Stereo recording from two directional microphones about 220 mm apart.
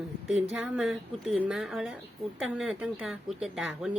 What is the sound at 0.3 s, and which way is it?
A woman's voice, 5° right (ahead or behind).